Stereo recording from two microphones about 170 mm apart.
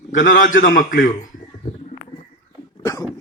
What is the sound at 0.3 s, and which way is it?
Speech, 75° left (ahead or behind).